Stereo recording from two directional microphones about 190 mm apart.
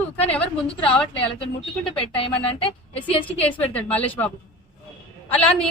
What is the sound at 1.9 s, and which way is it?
Speech, 30° left (ahead or behind).